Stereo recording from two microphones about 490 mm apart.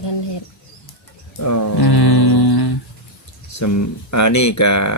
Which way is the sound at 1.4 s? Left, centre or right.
Left.